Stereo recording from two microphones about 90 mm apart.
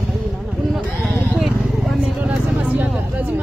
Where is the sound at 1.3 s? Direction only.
Centre (ahead or behind).